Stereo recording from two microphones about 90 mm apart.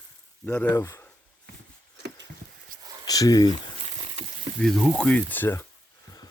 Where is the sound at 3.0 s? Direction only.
45° left (ahead or behind).